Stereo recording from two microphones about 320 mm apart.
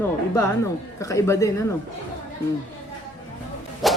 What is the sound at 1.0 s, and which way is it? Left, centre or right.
Speech, centre.